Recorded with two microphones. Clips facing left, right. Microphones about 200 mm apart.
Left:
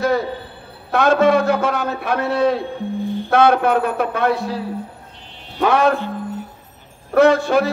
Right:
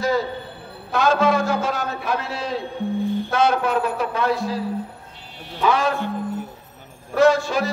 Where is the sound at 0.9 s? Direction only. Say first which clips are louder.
Left 4 dB; 60° left (ahead or behind).